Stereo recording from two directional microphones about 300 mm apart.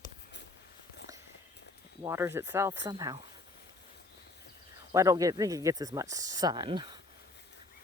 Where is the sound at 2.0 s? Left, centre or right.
Centre.